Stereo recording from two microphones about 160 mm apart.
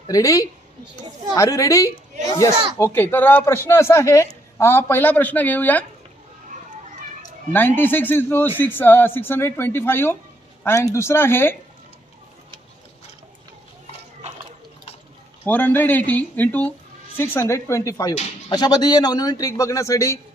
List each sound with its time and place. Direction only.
0.1 s a man's voice: 20° left (ahead or behind)
7.5 s a man's voice: 10° left (ahead or behind)
15.4 s a man's voice: 10° left (ahead or behind)